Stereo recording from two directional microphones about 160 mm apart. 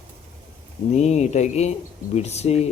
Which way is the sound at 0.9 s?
45° left (ahead or behind).